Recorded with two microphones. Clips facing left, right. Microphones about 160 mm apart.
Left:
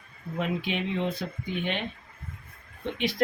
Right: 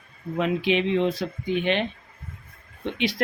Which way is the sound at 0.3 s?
85° right.